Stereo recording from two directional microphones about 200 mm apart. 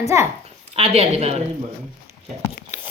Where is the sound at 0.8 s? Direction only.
30° right (ahead or behind).